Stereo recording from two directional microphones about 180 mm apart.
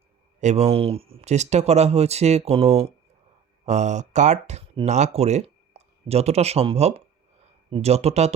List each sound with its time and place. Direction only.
0.3 s speech: 40° right (ahead or behind)